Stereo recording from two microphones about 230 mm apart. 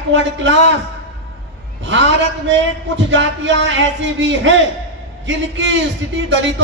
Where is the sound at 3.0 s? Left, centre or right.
Right.